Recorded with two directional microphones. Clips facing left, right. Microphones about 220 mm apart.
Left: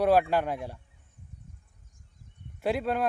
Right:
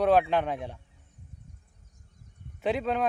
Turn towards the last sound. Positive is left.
turn(degrees=5)  # may be behind; listen again after turning